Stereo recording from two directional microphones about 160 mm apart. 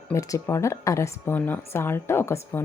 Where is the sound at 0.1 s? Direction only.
20° left (ahead or behind).